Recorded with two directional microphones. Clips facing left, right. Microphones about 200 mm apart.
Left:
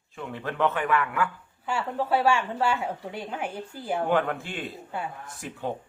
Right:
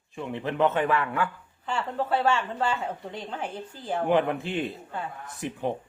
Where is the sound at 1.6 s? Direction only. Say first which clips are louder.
Left 1 dB; 10° left (ahead or behind).